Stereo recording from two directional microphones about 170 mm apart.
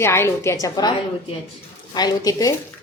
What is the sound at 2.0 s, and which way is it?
Speech, 20° left (ahead or behind).